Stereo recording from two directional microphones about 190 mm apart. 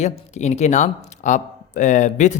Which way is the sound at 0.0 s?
35° left (ahead or behind).